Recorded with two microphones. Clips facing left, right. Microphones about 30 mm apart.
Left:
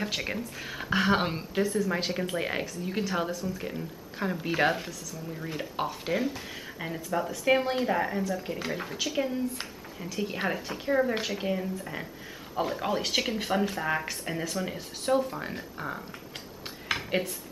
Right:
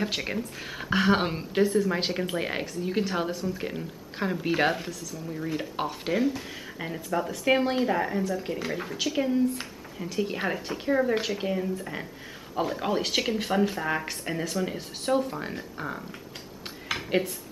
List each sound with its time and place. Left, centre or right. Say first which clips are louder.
0.0 s speech: right 2 dB; centre
1.5 s speech: right 5 dB; centre
3.3 s speech: right 2 dB; right
4.4 s speech: right 1 dB; centre